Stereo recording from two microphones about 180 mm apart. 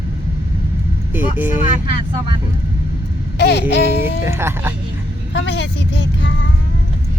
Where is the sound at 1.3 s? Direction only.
10° right (ahead or behind).